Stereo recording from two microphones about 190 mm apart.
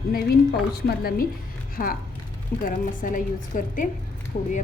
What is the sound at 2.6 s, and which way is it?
A woman's voice, 45° left (ahead or behind).